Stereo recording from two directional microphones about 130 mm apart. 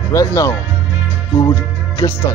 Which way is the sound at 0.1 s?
25° left (ahead or behind).